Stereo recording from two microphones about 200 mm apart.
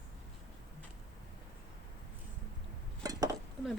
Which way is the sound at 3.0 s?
15° right (ahead or behind).